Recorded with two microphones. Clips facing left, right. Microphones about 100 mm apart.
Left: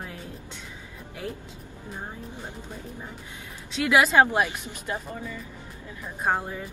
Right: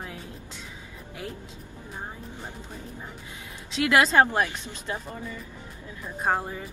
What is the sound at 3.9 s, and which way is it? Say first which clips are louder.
Speech: left 1 dB; 15° left (ahead or behind).